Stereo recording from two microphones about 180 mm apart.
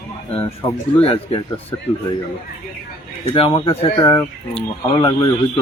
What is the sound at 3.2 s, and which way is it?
Speech, 30° left (ahead or behind).